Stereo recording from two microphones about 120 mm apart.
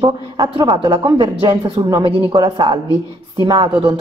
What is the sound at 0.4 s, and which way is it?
A woman's voice, 35° right (ahead or behind).